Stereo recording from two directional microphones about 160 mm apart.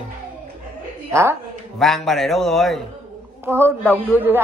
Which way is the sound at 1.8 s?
Centre (ahead or behind).